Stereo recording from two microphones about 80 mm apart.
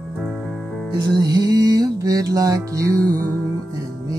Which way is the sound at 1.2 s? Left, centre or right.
Right.